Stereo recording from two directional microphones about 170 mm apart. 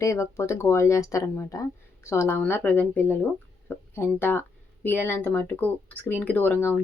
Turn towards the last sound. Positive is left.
turn(degrees=15)  # may be behind; listen again after turning